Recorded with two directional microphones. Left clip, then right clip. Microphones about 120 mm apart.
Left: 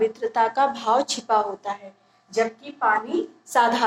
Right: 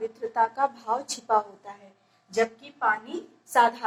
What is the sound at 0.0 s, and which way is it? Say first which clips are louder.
A woman's voice: left 5 dB; 35° left (ahead or behind).